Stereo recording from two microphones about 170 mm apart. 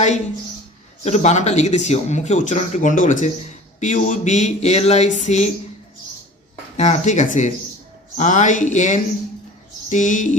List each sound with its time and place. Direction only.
1.0 s speech: 40° left (ahead or behind)
6.7 s speech: 45° left (ahead or behind)